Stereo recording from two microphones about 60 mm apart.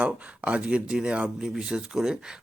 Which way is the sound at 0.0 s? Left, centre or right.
Centre.